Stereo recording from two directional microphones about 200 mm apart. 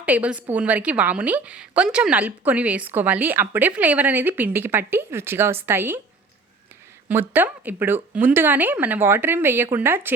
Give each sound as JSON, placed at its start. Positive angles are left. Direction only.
{"t": 0.0, "sound": "a woman's voice", "side_deg": -5}
{"t": 7.1, "sound": "a woman's voice", "side_deg": -10}